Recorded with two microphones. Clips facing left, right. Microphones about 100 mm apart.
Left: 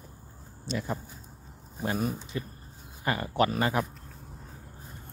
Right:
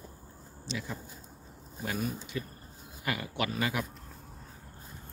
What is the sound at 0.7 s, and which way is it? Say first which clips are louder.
Speech: left 6 dB; 50° left (ahead or behind).